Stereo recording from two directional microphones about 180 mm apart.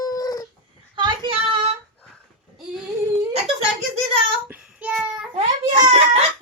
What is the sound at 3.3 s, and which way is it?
Wail, 35° right (ahead or behind).